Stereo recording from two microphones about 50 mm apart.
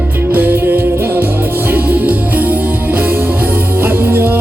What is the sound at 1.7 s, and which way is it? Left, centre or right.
Music, right.